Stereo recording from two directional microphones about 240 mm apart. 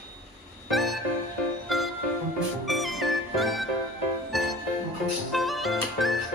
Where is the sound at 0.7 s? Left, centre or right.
Centre.